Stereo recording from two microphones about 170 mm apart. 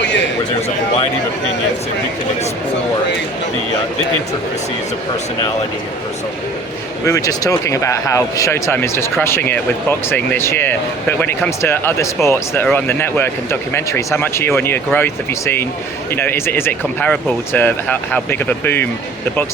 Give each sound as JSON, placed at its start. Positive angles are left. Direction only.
{"t": 7.0, "sound": "speech", "side_deg": 20}